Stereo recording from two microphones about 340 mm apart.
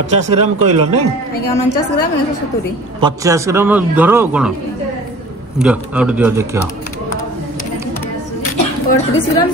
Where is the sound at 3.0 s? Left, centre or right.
Centre.